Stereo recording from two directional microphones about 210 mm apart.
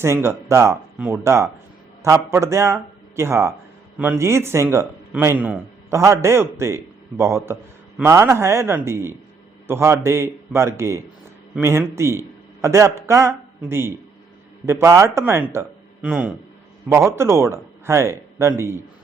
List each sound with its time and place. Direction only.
0.0 s a man's voice: 10° right (ahead or behind)